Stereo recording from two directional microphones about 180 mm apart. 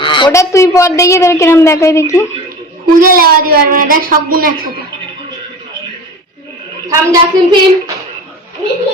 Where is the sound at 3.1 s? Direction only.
55° right (ahead or behind).